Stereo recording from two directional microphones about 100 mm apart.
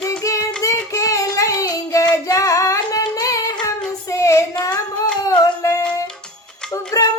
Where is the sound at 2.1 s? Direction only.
35° left (ahead or behind).